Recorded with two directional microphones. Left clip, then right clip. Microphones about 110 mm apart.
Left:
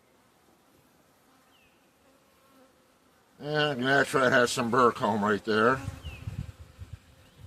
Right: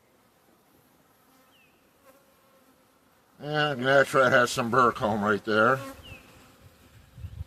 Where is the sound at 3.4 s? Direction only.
30° right (ahead or behind).